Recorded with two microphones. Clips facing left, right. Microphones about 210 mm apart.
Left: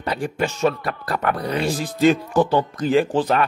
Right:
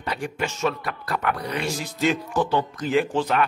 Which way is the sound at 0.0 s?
35° left (ahead or behind).